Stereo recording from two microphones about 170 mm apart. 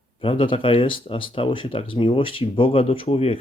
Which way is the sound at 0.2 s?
30° left (ahead or behind).